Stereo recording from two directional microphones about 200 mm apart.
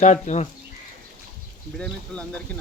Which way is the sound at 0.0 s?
35° left (ahead or behind).